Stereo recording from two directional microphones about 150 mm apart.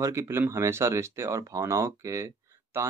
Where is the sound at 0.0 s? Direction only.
20° right (ahead or behind).